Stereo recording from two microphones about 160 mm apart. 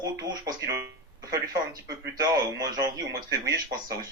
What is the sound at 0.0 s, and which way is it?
Speech, 25° right (ahead or behind).